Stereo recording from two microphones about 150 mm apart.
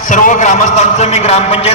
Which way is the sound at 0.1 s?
55° left (ahead or behind).